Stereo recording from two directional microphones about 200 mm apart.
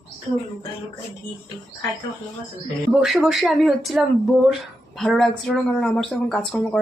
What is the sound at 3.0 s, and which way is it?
A woman's voice, centre (ahead or behind).